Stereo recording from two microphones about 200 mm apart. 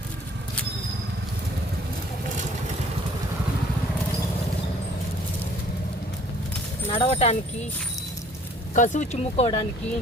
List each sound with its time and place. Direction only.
6.9 s speech: 30° left (ahead or behind)
8.7 s speech: 40° left (ahead or behind)